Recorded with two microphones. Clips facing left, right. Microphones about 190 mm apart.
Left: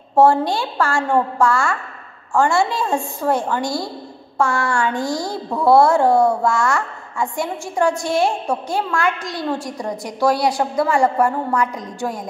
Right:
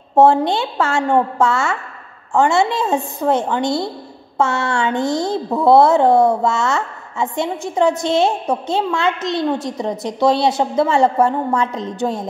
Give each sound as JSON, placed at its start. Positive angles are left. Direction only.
{"t": 0.1, "sound": "speech", "side_deg": -20}